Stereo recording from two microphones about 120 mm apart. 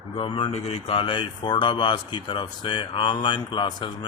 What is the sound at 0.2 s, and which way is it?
Speech, 40° left (ahead or behind).